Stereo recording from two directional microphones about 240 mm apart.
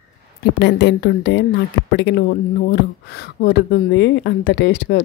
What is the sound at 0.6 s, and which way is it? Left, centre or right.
Speech, left.